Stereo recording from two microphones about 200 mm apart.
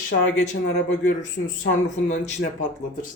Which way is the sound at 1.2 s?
40° left (ahead or behind).